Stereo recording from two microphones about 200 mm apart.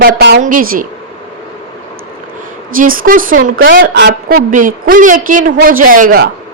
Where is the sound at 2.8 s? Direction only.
45° right (ahead or behind).